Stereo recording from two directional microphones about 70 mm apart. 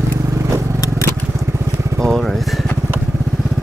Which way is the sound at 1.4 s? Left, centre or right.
Right.